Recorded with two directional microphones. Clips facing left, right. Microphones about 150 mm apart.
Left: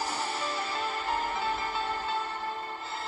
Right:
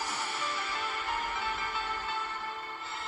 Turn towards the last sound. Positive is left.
turn(degrees=35)  # may be behind; listen again after turning